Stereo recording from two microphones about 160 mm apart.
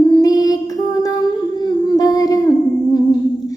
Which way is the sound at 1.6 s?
25° left (ahead or behind).